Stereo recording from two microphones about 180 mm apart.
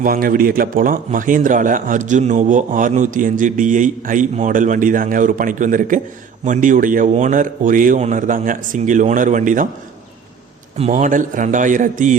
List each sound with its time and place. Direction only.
0.0 s speech: 50° right (ahead or behind)
10.8 s speech: 40° right (ahead or behind)